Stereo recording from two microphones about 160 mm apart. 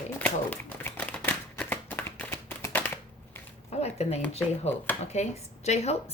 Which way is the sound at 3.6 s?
40° left (ahead or behind).